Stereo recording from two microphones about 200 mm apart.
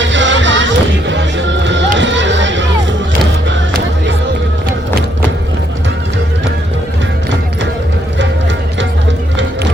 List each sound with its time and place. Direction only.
0.0 s music: 65° right (ahead or behind)